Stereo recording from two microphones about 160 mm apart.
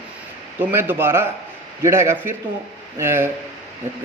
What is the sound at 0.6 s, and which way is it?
A man's voice, 15° right (ahead or behind).